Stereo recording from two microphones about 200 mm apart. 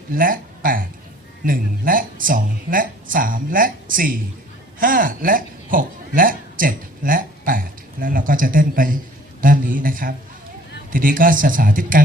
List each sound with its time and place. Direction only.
0.1 s speech: 45° right (ahead or behind)